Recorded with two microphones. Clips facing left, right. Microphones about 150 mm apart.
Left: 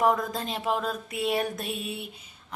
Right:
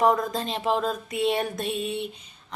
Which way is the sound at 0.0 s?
Centre (ahead or behind).